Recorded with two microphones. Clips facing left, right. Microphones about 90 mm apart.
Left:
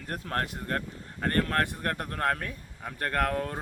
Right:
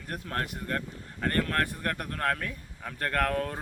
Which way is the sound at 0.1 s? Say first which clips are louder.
Left 2 dB; 35° left (ahead or behind).